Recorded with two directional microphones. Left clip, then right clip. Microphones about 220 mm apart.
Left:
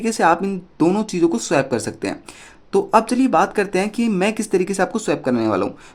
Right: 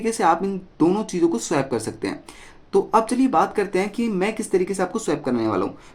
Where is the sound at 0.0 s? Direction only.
20° left (ahead or behind).